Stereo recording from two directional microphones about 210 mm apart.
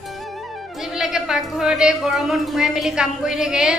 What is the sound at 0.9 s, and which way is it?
A woman's voice, centre (ahead or behind).